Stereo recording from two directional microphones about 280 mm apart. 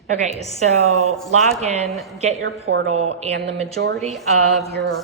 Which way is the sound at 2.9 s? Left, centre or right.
Right.